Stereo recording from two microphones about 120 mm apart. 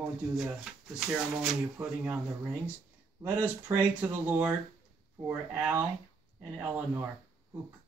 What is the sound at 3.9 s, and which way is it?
Speech, 10° right (ahead or behind).